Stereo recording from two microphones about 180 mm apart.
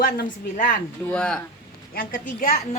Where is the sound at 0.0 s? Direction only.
50° left (ahead or behind).